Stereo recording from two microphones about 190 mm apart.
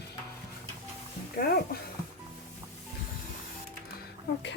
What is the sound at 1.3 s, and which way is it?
Speech, 50° left (ahead or behind).